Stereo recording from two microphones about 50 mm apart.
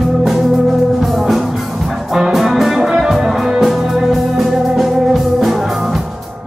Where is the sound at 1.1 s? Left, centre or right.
Centre.